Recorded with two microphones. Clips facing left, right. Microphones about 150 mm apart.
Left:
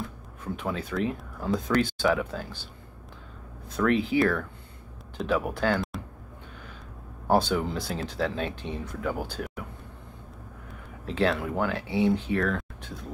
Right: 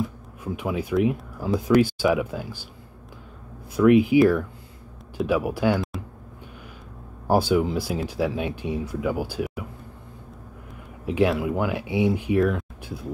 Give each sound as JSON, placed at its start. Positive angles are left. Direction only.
{"t": 0.0, "sound": "speech", "side_deg": -10}
{"t": 3.7, "sound": "speech", "side_deg": -10}
{"t": 5.8, "sound": "a sound", "side_deg": 0}
{"t": 7.2, "sound": "speech", "side_deg": -10}
{"t": 11.1, "sound": "speech", "side_deg": -15}